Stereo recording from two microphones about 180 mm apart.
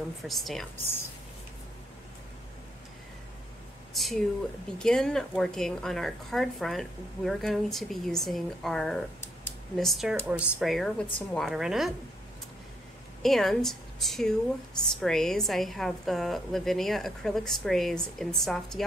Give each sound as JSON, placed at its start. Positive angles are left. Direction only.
{"t": 0.2, "sound": "a woman's voice", "side_deg": 0}
{"t": 3.9, "sound": "a sound", "side_deg": 0}
{"t": 4.7, "sound": "a woman's voice", "side_deg": 5}
{"t": 13.2, "sound": "a woman's voice", "side_deg": 0}